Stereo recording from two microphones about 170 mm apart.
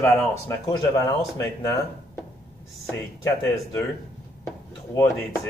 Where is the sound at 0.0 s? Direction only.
15° left (ahead or behind).